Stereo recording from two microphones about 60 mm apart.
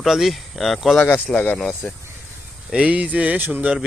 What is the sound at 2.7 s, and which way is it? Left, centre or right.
Speech, right.